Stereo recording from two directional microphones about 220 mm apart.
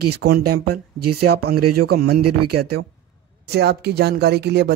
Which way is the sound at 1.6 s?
90° right.